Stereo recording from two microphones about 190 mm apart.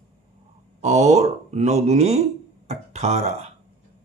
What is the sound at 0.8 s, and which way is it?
Speech, 35° right (ahead or behind).